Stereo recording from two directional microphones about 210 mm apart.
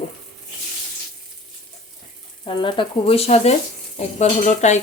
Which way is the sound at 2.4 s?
25° left (ahead or behind).